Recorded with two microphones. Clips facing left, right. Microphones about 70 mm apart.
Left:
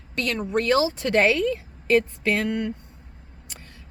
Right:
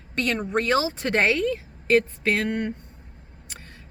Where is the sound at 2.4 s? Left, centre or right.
Right.